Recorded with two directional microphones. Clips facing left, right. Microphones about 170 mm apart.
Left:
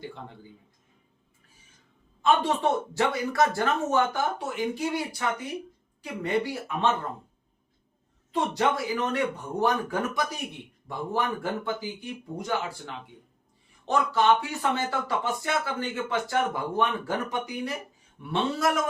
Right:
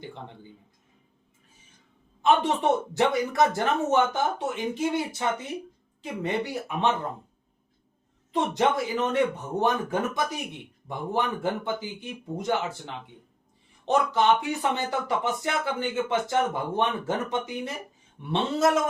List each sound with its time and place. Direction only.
2.2 s speech: 20° right (ahead or behind)
8.3 s speech: 20° right (ahead or behind)